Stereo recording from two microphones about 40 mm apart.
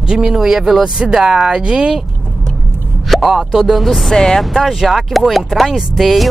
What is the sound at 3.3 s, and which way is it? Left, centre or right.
Speech, centre.